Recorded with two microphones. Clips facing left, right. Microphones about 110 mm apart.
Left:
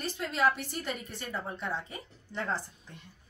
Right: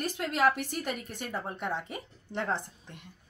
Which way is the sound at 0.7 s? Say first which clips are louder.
Right 2 dB; 55° right (ahead or behind).